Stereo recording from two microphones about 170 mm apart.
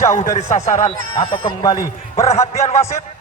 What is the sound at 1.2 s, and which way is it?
Speech, 30° left (ahead or behind).